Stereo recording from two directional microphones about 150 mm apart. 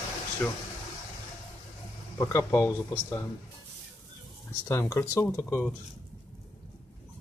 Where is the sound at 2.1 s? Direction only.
20° left (ahead or behind).